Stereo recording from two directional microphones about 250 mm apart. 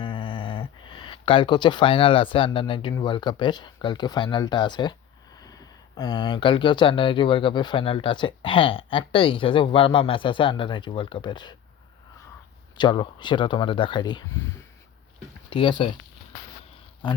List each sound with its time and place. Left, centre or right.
0.0 s speech: centre
12.7 s speech: centre
15.4 s speech: centre